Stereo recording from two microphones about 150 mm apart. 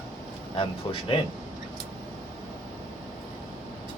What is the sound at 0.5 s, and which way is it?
Speech, 35° left (ahead or behind).